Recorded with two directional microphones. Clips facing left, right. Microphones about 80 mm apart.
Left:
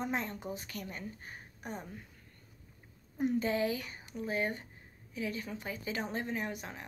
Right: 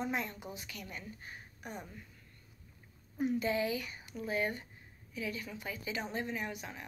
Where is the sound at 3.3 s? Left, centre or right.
Left.